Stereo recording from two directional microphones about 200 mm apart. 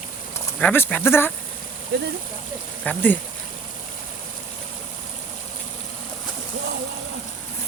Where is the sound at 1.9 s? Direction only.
55° right (ahead or behind).